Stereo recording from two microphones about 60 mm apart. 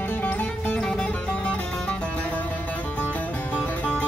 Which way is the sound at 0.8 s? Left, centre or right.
Centre.